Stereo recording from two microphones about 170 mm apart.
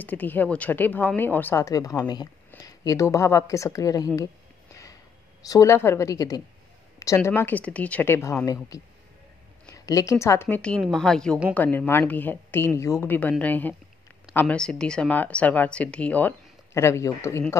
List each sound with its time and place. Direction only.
0.0 s speech: 10° left (ahead or behind)
5.5 s a woman's voice: 15° left (ahead or behind)